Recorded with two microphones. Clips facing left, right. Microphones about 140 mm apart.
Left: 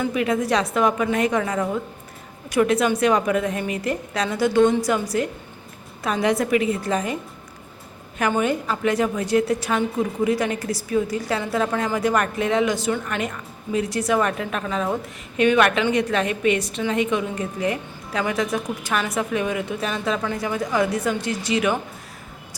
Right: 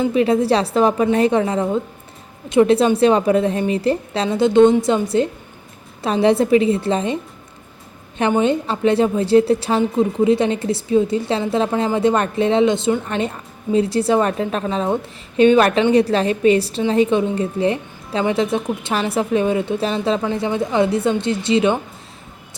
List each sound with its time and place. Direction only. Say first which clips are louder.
0.0 s a woman's voice: right 6 dB; 30° right (ahead or behind)
8.2 s a woman's voice: right 5 dB; 25° right (ahead or behind)